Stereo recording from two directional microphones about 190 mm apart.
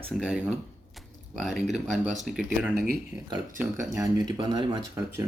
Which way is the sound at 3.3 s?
15° right (ahead or behind).